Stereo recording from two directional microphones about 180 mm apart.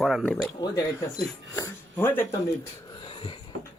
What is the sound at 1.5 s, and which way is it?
Speech, 15° left (ahead or behind).